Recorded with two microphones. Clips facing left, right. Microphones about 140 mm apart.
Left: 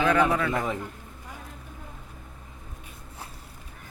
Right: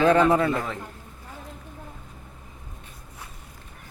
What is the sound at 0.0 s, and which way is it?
Speech, 30° right (ahead or behind).